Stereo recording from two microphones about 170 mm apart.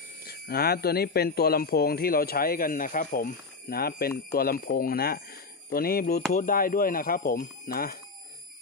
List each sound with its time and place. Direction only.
0.2 s a man's voice: 65° left (ahead or behind)